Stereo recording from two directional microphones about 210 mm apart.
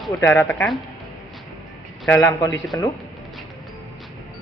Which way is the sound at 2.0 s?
15° left (ahead or behind).